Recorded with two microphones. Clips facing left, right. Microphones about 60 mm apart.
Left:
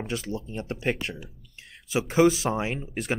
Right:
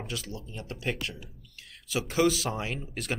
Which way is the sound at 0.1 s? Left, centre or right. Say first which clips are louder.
Left 7 dB; left.